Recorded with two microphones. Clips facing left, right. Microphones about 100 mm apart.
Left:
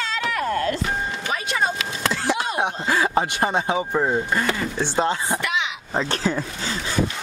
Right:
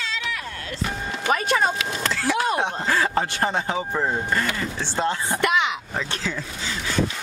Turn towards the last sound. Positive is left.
turn(degrees=40)  # may be behind; listen again after turning